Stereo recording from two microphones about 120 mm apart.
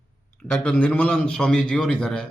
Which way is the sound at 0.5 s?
10° left (ahead or behind).